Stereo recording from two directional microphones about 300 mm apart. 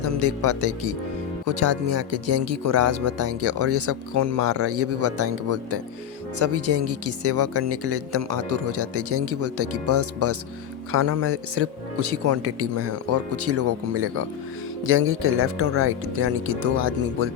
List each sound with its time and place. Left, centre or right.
0.0 s speech: right